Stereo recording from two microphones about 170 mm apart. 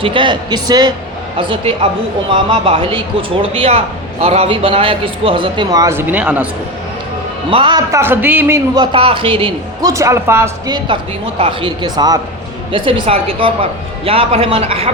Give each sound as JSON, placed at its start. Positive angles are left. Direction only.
{"t": 0.0, "sound": "speech", "side_deg": -30}
{"t": 7.5, "sound": "speech", "side_deg": -30}
{"t": 7.9, "sound": "speech", "side_deg": -15}
{"t": 9.8, "sound": "speech", "side_deg": -15}
{"t": 11.3, "sound": "speech", "side_deg": -30}